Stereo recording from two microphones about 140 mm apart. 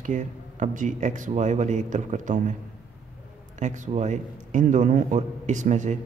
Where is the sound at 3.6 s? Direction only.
60° right (ahead or behind).